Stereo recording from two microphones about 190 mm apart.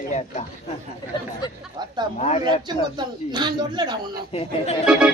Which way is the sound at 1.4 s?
20° left (ahead or behind).